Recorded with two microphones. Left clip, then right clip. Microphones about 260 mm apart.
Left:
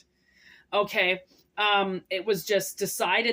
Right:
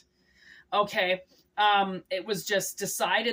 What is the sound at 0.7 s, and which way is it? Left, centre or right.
Speech, centre.